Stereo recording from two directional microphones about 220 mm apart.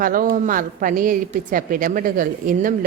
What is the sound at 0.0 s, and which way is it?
Speech, 40° right (ahead or behind).